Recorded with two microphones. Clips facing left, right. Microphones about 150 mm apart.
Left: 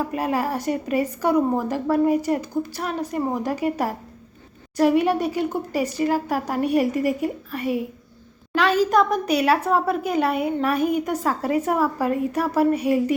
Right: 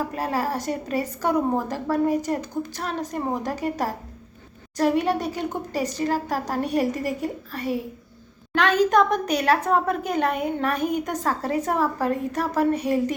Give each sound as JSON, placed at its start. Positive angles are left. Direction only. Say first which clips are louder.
{"t": 0.1, "sound": "a woman's voice", "louder": "left 2 dB", "side_deg": 15}